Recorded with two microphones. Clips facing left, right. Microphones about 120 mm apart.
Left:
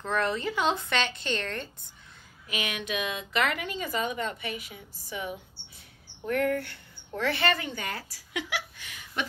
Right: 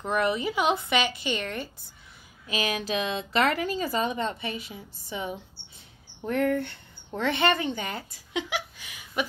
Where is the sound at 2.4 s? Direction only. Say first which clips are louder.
Right 5 dB; 30° right (ahead or behind).